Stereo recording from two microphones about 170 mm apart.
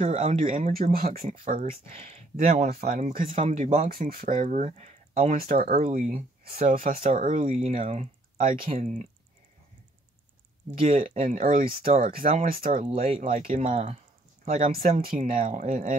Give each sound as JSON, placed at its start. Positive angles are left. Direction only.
{"t": 0.0, "sound": "speech", "side_deg": -40}
{"t": 2.7, "sound": "speech", "side_deg": -55}
{"t": 3.3, "sound": "speech", "side_deg": -40}
{"t": 3.9, "sound": "speech", "side_deg": -60}
{"t": 5.5, "sound": "speech", "side_deg": -55}
{"t": 6.6, "sound": "speech", "side_deg": -40}
{"t": 6.9, "sound": "speech", "side_deg": -50}
{"t": 10.9, "sound": "speech", "side_deg": -50}
{"t": 13.4, "sound": "speech", "side_deg": -35}
{"t": 14.4, "sound": "speech", "side_deg": -50}